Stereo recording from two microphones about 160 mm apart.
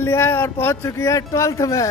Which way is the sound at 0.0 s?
15° left (ahead or behind).